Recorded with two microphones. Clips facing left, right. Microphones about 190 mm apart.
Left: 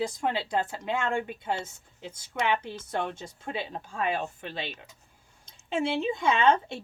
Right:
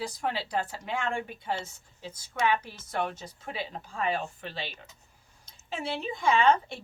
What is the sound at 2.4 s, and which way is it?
A woman's voice, 25° left (ahead or behind).